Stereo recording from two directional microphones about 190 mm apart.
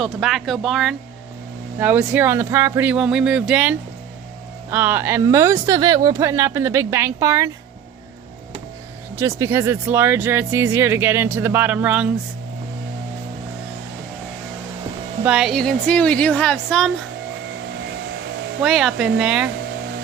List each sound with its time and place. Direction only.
0.0 s speech: centre (ahead or behind); by 7.5 s 15° right (ahead or behind)
9.1 s speech: 15° right (ahead or behind)
15.2 s speech: 5° right (ahead or behind)
18.6 s speech: centre (ahead or behind)